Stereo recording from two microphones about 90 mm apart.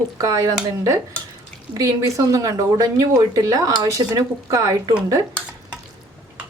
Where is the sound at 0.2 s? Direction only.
40° right (ahead or behind).